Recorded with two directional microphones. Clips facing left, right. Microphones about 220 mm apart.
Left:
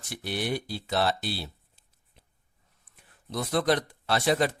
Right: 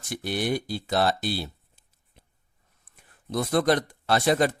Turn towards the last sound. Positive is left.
turn(degrees=-50)  # may be behind; listen again after turning